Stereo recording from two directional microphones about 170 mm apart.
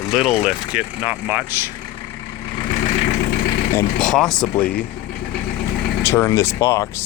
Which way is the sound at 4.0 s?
5° left (ahead or behind).